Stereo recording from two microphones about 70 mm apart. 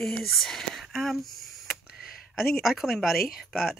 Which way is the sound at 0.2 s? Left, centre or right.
Centre.